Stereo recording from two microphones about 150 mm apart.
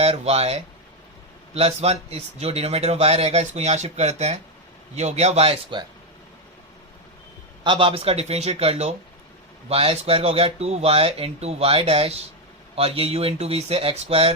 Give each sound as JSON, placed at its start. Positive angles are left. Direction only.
{"t": 0.0, "sound": "a man's voice", "side_deg": -45}
{"t": 7.6, "sound": "a man's voice", "side_deg": -35}